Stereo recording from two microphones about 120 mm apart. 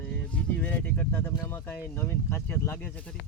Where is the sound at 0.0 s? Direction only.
10° left (ahead or behind).